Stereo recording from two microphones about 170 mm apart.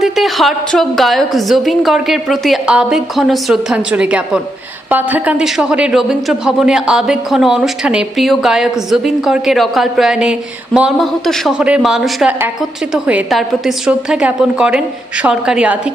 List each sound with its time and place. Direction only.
0.0 s speech: centre (ahead or behind)